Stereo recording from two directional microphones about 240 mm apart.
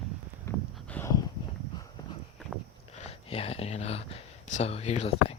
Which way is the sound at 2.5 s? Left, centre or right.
Centre.